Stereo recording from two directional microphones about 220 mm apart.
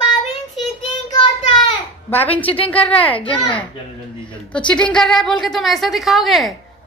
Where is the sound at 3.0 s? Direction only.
25° left (ahead or behind).